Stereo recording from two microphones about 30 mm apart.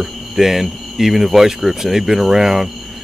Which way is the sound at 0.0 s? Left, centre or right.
Centre.